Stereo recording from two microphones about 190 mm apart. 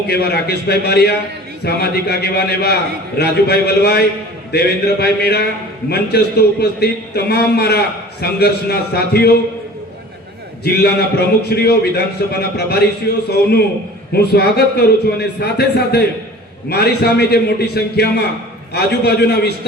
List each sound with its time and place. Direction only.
0.1 s a man's voice: 55° left (ahead or behind)
10.6 s a man's voice: 60° left (ahead or behind)